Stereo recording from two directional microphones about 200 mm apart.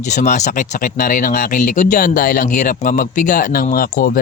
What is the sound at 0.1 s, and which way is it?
Speech, 35° left (ahead or behind).